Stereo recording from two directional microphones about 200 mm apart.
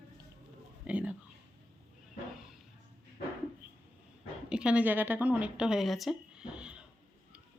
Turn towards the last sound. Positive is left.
turn(degrees=-5)  # may be behind; listen again after turning